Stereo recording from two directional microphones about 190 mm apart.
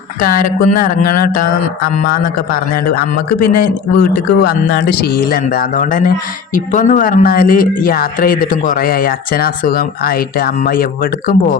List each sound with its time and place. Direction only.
0.2 s speech: 45° left (ahead or behind)
3.9 s speech: 50° left (ahead or behind)